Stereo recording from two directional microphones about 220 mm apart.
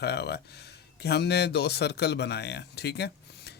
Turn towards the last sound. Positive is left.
turn(degrees=50)  # may be behind; listen again after turning